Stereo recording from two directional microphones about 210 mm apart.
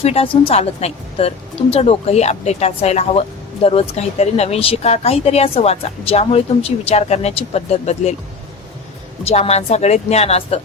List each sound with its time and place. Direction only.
0.0 s speech: 30° left (ahead or behind)
9.2 s a woman's voice: 30° left (ahead or behind)